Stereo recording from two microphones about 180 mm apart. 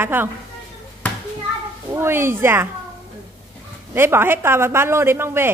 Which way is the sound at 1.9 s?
15° right (ahead or behind).